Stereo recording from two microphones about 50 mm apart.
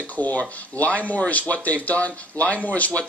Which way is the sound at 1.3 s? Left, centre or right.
Left.